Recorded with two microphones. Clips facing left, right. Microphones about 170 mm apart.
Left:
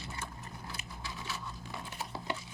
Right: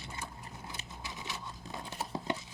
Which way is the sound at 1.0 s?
20° right (ahead or behind).